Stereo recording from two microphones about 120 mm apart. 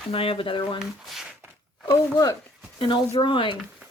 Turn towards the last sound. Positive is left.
turn(degrees=45)  # may be behind; listen again after turning